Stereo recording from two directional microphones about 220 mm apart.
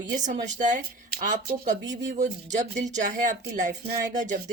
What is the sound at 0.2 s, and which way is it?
Speech, 35° right (ahead or behind).